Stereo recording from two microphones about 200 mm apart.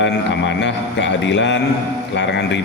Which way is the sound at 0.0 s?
60° left (ahead or behind).